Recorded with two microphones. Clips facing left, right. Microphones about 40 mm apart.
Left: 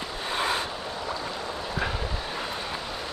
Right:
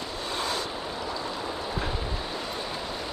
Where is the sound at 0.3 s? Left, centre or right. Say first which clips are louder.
Left 4 dB; left.